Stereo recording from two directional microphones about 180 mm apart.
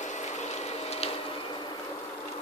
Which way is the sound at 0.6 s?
35° left (ahead or behind).